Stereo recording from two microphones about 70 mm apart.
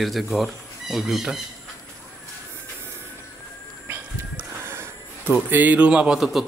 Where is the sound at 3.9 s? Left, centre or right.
Right.